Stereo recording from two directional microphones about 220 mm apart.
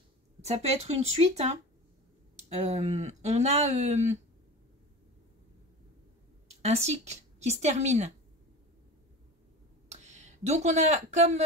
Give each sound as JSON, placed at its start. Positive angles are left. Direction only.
{"t": 0.5, "sound": "speech", "side_deg": -30}
{"t": 6.6, "sound": "speech", "side_deg": -30}
{"t": 9.8, "sound": "speech", "side_deg": -30}